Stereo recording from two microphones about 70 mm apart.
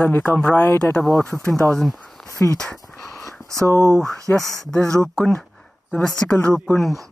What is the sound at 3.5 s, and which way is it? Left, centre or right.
Speech, right.